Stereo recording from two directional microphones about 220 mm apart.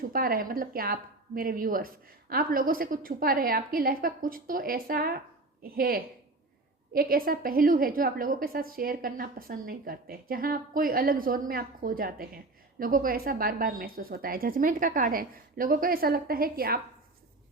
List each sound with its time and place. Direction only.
0.1 s a woman's voice: 40° right (ahead or behind)